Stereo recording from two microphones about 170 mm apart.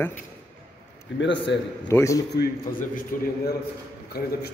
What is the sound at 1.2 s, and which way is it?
Speech, 90° left.